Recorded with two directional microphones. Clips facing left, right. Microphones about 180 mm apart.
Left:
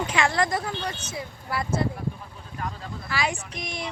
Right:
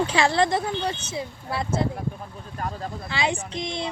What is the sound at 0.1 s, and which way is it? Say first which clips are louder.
Speech: right 3 dB; 30° right (ahead or behind).